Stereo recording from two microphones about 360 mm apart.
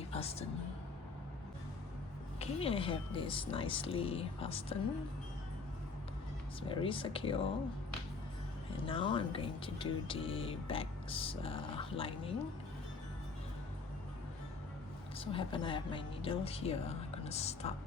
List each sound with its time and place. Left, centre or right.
0.1 s speech: centre
2.4 s speech: centre
6.6 s speech: centre
8.7 s speech: centre
15.2 s speech: centre